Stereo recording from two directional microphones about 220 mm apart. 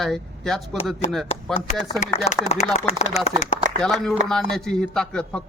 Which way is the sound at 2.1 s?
30° left (ahead or behind).